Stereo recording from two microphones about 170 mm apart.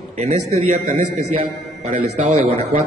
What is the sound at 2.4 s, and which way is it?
Speech, 35° right (ahead or behind).